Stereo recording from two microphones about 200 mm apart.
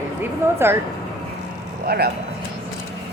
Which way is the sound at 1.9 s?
50° right (ahead or behind).